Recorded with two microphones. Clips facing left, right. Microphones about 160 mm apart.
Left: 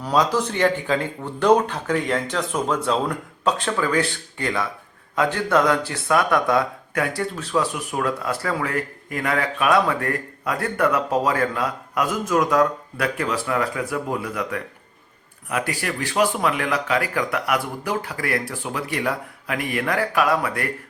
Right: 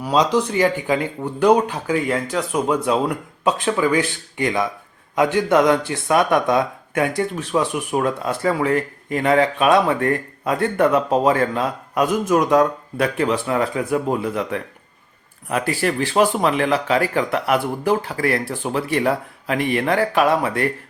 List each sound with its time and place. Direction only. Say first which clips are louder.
0.1 s speech: right 3 dB; 20° right (ahead or behind)